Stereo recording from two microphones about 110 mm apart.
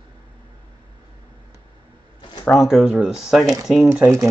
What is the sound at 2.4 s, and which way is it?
Speech, 25° left (ahead or behind).